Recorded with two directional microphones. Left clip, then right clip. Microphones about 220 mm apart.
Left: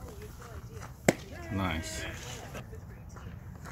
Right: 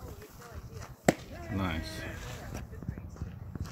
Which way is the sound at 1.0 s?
Centre (ahead or behind).